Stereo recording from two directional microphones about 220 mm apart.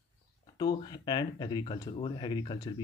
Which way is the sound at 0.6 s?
20° left (ahead or behind).